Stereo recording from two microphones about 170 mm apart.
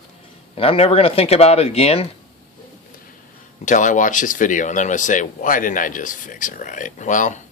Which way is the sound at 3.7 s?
50° left (ahead or behind).